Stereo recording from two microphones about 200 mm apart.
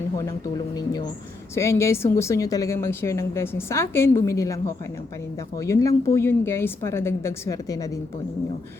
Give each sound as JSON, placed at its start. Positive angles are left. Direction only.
{"t": 0.2, "sound": "speech", "side_deg": 20}